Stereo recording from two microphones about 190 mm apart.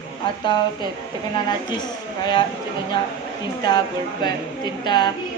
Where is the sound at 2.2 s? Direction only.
25° left (ahead or behind).